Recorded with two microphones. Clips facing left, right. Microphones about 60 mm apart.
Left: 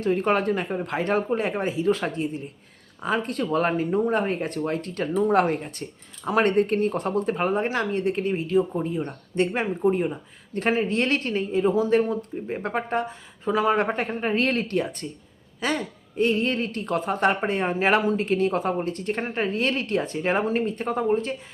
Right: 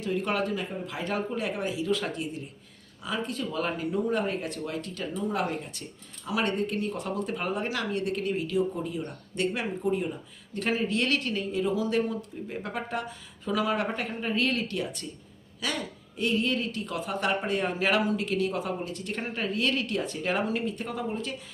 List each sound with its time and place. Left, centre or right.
0.0 s speech: left
3.0 s speech: left